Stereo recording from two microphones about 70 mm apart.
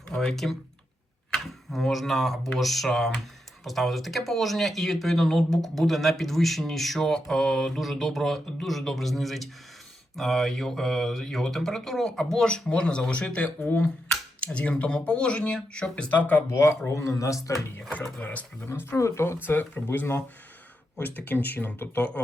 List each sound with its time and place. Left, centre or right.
0.1 s speech: centre
16.5 s speech: left
18.2 s speech: left
18.7 s speech: left